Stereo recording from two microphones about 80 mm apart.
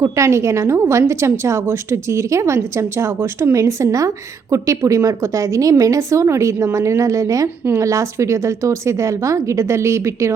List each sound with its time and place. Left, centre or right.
0.0 s a woman's voice: right